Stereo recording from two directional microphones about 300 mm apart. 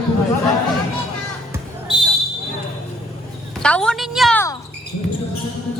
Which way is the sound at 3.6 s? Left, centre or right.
Centre.